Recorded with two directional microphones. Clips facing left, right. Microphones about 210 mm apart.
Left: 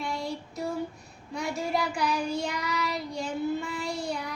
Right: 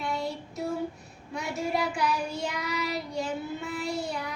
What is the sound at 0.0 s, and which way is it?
Child singing, 5° right (ahead or behind).